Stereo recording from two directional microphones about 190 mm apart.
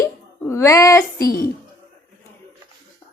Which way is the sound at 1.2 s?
50° left (ahead or behind).